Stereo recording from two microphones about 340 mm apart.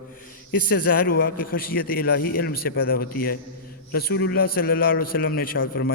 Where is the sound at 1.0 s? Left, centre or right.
Left.